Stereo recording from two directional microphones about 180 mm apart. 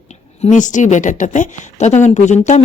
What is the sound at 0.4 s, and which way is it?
Speech, 45° left (ahead or behind).